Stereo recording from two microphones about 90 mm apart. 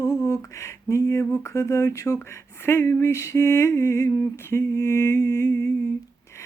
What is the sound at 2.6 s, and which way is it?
Speech, 30° left (ahead or behind).